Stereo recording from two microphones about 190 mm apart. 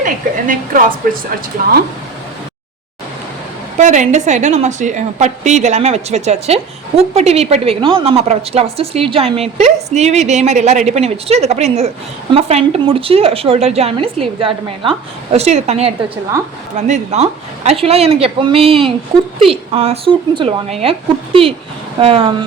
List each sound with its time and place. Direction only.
0.0 s a woman's voice: 45° right (ahead or behind)
3.8 s a woman's voice: 40° right (ahead or behind)
22.0 s a woman's voice: 30° right (ahead or behind)